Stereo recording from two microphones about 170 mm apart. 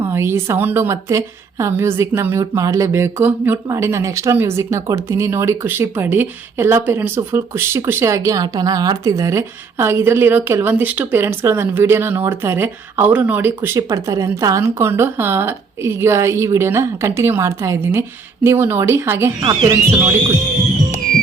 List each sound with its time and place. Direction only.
0.0 s a woman's voice: 15° right (ahead or behind)
19.4 s speech: 30° right (ahead or behind)